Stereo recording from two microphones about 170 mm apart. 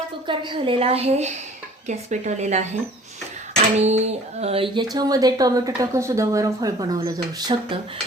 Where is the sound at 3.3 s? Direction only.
40° right (ahead or behind).